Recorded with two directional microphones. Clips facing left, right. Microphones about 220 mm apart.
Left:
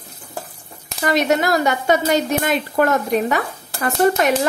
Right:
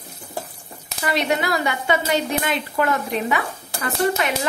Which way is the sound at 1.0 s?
45° left (ahead or behind).